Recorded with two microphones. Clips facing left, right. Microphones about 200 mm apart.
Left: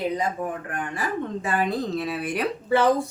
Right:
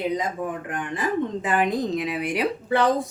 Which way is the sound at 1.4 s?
15° right (ahead or behind).